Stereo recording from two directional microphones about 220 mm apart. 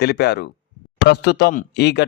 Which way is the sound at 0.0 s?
50° left (ahead or behind).